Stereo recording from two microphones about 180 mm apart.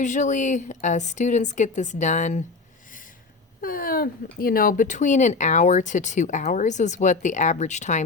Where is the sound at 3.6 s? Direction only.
50° left (ahead or behind).